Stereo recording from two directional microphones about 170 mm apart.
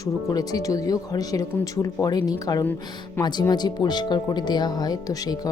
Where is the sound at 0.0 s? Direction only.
20° left (ahead or behind).